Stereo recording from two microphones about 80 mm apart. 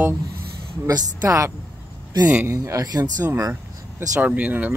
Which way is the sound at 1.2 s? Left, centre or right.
Right.